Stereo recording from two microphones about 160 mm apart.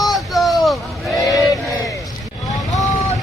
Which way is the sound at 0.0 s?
Centre (ahead or behind).